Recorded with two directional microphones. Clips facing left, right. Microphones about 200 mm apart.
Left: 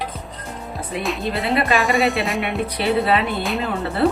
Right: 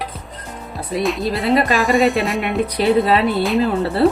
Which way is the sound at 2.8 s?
40° right (ahead or behind).